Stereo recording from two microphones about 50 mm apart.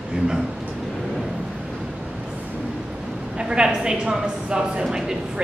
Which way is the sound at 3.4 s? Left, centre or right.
Centre.